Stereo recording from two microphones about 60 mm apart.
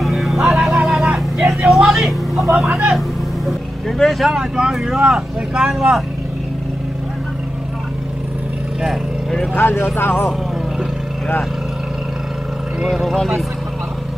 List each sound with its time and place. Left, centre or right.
0.0 s vehicle: centre
2.5 s speech: centre
2.9 s vehicle: centre
4.0 s speech: centre
4.3 s speech: centre
9.6 s speech: left
12.8 s speech: centre